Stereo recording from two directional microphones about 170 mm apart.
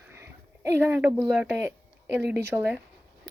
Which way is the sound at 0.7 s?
10° right (ahead or behind).